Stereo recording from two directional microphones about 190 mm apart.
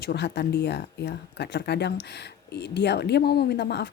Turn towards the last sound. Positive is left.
turn(degrees=65)  # may be behind; listen again after turning